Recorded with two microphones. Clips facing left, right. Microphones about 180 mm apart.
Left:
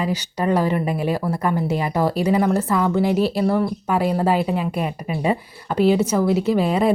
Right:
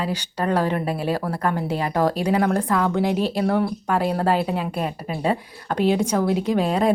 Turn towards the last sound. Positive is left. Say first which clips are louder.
# left 2 dB
turn(degrees=5)  # may be behind; listen again after turning